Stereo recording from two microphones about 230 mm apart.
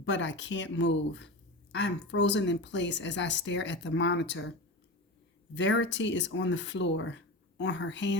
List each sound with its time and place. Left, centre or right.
0.0 s speech: left
5.5 s speech: left